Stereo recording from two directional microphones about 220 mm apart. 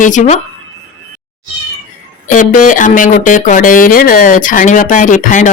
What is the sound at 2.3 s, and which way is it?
Speech, 35° left (ahead or behind).